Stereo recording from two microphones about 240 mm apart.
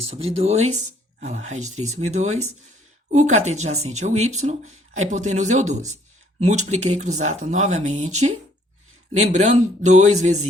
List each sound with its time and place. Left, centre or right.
0.2 s speech: right